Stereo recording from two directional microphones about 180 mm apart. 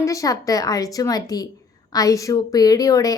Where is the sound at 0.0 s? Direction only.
20° left (ahead or behind).